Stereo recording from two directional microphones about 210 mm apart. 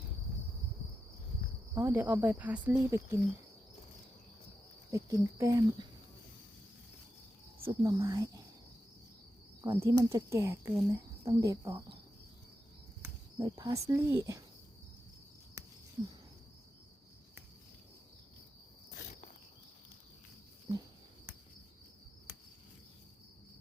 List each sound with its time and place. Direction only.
1.7 s speech: 10° right (ahead or behind)
4.9 s speech: 15° right (ahead or behind)
7.6 s speech: 15° right (ahead or behind)
9.6 s speech: 15° right (ahead or behind)
13.0 s speech: 20° right (ahead or behind)